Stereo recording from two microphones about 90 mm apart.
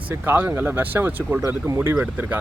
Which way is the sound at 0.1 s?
25° right (ahead or behind).